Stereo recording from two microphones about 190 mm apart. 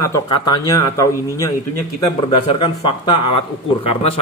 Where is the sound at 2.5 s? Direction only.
30° left (ahead or behind).